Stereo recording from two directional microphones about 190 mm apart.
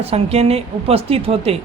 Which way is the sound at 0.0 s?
35° right (ahead or behind).